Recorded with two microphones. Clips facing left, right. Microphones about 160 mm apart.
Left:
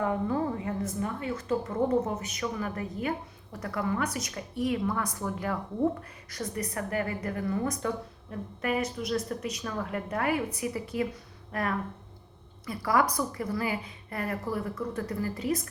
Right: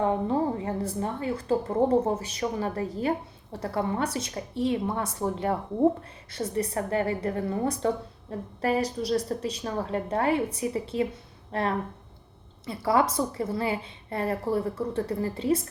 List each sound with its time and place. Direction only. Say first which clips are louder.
0.0 s a woman's voice: right 3 dB; 25° right (ahead or behind)